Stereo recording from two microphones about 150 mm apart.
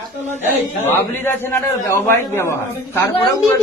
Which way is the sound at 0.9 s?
15° left (ahead or behind).